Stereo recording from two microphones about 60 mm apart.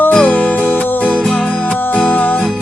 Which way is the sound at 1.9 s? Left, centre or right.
Left.